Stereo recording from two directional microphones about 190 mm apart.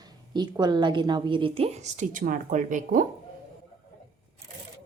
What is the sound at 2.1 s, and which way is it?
Speech, 45° right (ahead or behind).